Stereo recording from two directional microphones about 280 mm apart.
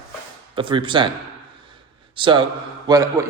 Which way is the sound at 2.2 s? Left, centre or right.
Centre.